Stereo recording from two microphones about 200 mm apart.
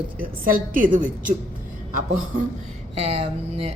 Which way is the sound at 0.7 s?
40° right (ahead or behind).